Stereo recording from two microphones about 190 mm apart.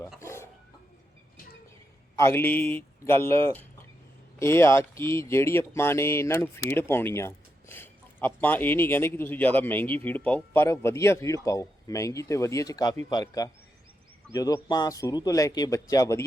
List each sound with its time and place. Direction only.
0.2 s dog: 15° left (ahead or behind)
2.1 s a man's voice: 15° left (ahead or behind)